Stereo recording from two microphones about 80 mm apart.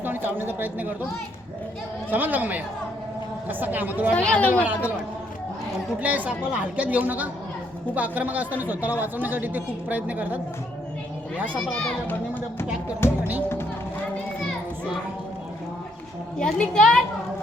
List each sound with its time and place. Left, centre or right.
0.0 s speech: right
2.1 s a man's voice: right
3.6 s a man's voice: right
4.1 s a child's voice: centre
6.0 s a man's voice: centre
13.0 s speech: left
16.4 s a child's voice: centre